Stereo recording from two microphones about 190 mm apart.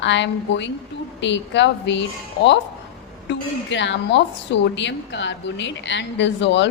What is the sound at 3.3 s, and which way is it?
A woman's voice, 70° left (ahead or behind).